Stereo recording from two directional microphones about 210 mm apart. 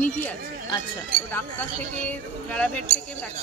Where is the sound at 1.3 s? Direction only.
10° left (ahead or behind).